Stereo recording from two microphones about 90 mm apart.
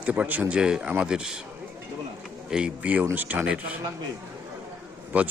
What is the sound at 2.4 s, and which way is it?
A man's voice, 10° right (ahead or behind).